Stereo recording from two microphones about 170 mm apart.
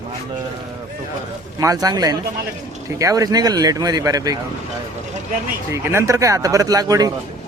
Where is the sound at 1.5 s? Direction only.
20° right (ahead or behind).